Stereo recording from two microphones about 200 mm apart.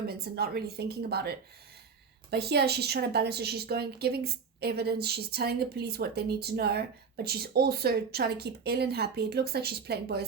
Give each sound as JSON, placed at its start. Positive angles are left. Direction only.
{"t": 0.1, "sound": "a woman's voice", "side_deg": -50}